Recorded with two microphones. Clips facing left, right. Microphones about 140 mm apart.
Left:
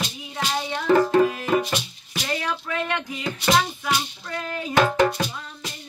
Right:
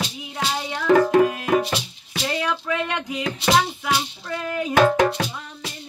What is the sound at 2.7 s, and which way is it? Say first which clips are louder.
Speech: right 2 dB; 15° right (ahead or behind).